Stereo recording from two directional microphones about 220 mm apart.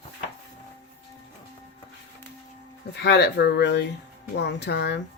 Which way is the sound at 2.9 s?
50° left (ahead or behind).